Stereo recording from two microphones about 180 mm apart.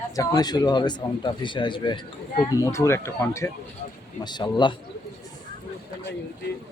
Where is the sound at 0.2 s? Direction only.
20° left (ahead or behind).